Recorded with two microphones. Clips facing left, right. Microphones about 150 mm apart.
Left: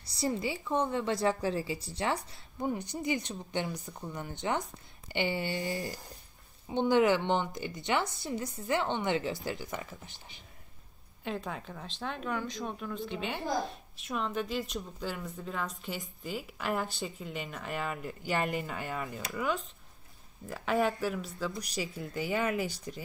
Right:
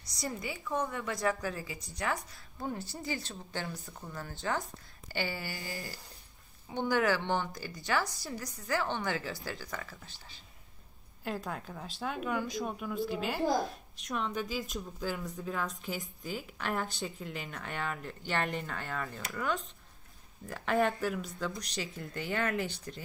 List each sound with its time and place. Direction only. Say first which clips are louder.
0.0 s a woman's voice: left 6 dB; 30° left (ahead or behind)
2.6 s a woman's voice: left 5 dB; 15° left (ahead or behind)
11.2 s speech: even; centre (ahead or behind)